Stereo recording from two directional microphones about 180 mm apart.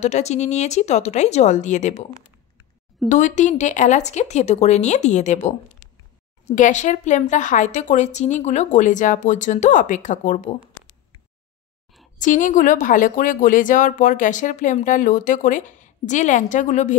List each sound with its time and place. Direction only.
0.0 s speech: 40° left (ahead or behind)
3.1 s speech: 45° left (ahead or behind)
12.2 s speech: 45° left (ahead or behind)